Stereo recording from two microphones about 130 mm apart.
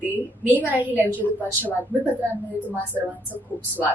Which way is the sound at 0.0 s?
15° right (ahead or behind).